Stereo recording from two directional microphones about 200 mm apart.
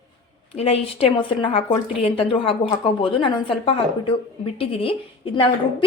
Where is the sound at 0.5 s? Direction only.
30° left (ahead or behind).